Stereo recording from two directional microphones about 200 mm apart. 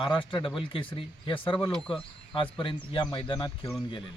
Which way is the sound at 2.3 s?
25° left (ahead or behind).